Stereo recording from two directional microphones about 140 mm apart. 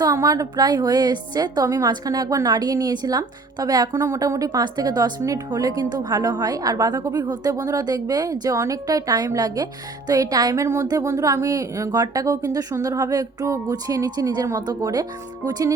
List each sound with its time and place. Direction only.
0.0 s a woman's voice: 25° right (ahead or behind)